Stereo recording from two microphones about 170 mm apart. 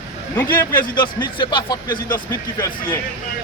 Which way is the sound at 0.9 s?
25° left (ahead or behind).